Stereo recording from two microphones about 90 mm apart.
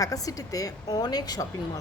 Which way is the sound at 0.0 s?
40° left (ahead or behind).